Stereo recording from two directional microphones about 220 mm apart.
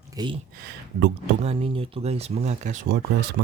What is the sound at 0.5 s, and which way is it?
Speech, 50° right (ahead or behind).